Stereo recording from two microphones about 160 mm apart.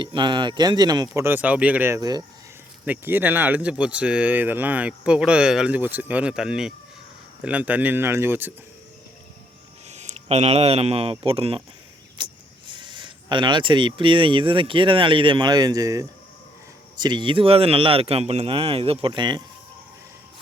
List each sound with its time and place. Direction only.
0.0 s speech: 30° right (ahead or behind)
2.8 s speech: 10° right (ahead or behind)
9.9 s speech: 45° right (ahead or behind); by 19.4 s 30° right (ahead or behind)